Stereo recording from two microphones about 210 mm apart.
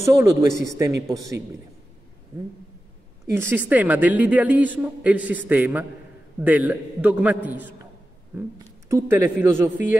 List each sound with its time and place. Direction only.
0.0 s a woman's voice: 15° right (ahead or behind)
3.3 s a woman's voice: 10° right (ahead or behind)